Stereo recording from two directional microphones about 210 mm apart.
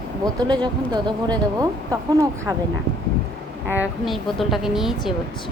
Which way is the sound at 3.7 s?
5° right (ahead or behind).